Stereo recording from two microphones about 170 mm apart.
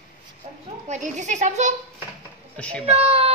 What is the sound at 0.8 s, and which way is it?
Speech, 45° right (ahead or behind).